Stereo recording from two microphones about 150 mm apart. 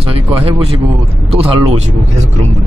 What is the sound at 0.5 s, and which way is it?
Speech, 40° right (ahead or behind).